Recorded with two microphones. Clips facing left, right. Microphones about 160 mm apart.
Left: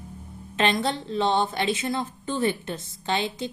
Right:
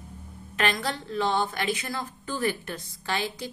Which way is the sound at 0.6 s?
25° left (ahead or behind).